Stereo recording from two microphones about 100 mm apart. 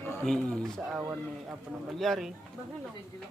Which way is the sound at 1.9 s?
Centre (ahead or behind).